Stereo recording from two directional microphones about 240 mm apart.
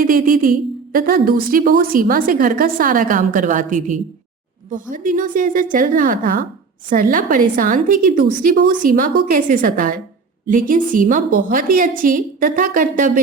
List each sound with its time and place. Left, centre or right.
0.0 s a woman's voice: right